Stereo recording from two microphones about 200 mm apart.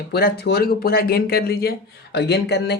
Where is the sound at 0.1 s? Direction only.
55° left (ahead or behind).